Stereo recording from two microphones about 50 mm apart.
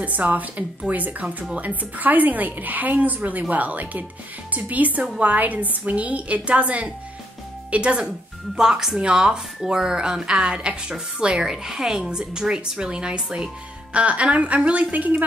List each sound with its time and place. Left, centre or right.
0.0 s a woman's voice: right
8.5 s a woman's voice: centre
11.5 s a woman's voice: centre; by 15.2 s right